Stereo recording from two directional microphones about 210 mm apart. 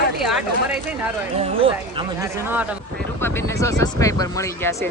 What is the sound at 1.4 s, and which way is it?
Speech, 25° right (ahead or behind).